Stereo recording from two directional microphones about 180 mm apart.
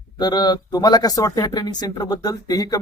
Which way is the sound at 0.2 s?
20° left (ahead or behind).